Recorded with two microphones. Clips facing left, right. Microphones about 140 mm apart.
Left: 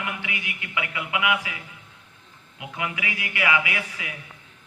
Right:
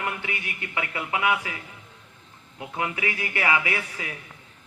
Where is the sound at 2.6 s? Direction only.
35° right (ahead or behind).